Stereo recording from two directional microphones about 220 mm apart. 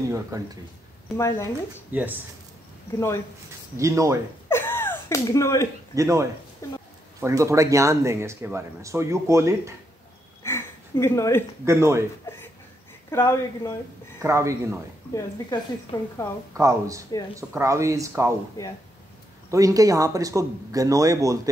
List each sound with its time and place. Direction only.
0.1 s speech: 15° right (ahead or behind)
1.1 s speech: 15° left (ahead or behind)
1.9 s speech: 10° right (ahead or behind)
3.7 s speech: 15° right (ahead or behind)
4.5 s a sound: 10° left (ahead or behind)
5.9 s speech: 15° right (ahead or behind)
10.4 s a sound: 10° left (ahead or behind)
11.6 s speech: 10° right (ahead or behind)
12.3 s speech: 10° left (ahead or behind)
14.2 s speech: 15° right (ahead or behind)
15.1 s speech: 15° left (ahead or behind)
16.5 s speech: 15° right (ahead or behind)
19.5 s speech: 15° right (ahead or behind)